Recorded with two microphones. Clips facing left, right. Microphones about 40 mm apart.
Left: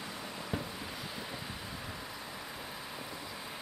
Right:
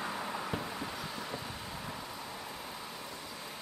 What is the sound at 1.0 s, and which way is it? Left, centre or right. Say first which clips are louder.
Vehicle: right 2 dB; centre.